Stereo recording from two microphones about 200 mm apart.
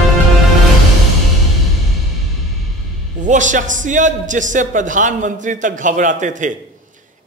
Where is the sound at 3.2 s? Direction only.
40° right (ahead or behind).